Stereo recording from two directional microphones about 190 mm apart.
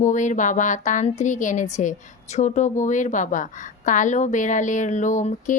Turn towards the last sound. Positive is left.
turn(degrees=40)  # may be behind; listen again after turning